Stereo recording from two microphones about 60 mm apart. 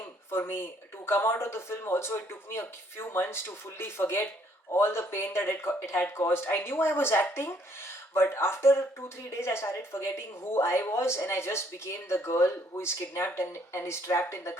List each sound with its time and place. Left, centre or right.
0.0 s speech: left